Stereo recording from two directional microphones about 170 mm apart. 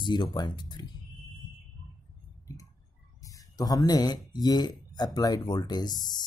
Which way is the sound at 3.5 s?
20° left (ahead or behind).